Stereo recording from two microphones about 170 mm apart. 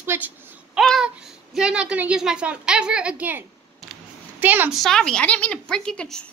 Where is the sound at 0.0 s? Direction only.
15° right (ahead or behind).